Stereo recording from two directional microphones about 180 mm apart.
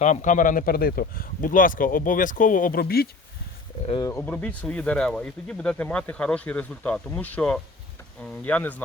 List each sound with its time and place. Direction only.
0.0 s speech: 45° left (ahead or behind)
4.0 s speech: 15° left (ahead or behind)